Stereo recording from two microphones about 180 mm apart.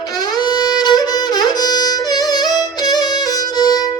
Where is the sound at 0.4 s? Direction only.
20° left (ahead or behind).